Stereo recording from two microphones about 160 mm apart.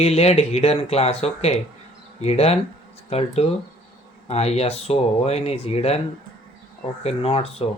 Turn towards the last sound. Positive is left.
turn(degrees=40)  # may be behind; listen again after turning